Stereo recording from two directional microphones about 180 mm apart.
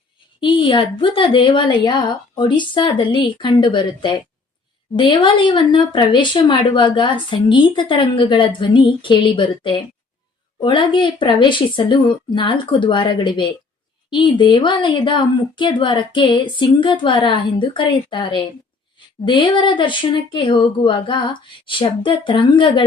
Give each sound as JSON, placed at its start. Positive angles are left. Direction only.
{"t": 0.3, "sound": "speech", "side_deg": 25}